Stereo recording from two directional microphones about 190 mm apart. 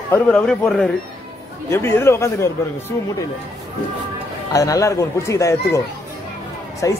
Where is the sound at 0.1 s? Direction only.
5° left (ahead or behind).